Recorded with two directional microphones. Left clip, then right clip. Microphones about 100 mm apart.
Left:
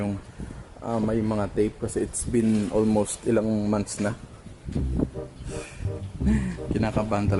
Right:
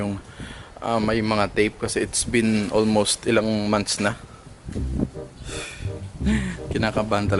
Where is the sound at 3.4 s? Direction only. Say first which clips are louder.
Right 3 dB; 50° left (ahead or behind).